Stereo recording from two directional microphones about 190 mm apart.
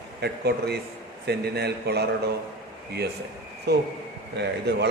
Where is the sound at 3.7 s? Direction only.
60° right (ahead or behind).